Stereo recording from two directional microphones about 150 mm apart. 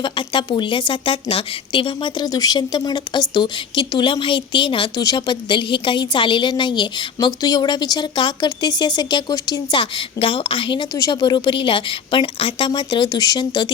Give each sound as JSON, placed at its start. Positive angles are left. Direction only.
{"t": 0.0, "sound": "a woman's voice", "side_deg": 30}